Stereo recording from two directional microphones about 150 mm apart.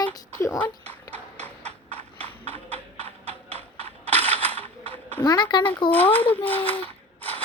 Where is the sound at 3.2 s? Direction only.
40° right (ahead or behind).